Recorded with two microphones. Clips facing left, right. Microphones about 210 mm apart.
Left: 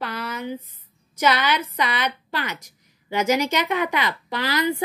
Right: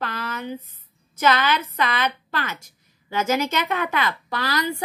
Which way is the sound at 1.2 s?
15° left (ahead or behind).